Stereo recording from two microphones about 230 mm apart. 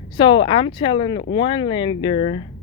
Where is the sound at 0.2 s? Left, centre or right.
Left.